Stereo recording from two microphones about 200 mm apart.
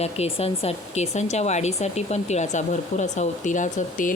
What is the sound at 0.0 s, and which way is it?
Speech, 30° left (ahead or behind).